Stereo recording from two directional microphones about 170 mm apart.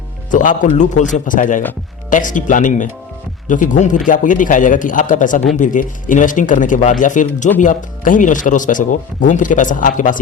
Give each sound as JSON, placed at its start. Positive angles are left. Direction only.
{"t": 0.3, "sound": "speech", "side_deg": 50}